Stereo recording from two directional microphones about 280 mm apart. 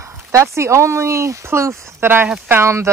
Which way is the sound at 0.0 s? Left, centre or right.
Centre.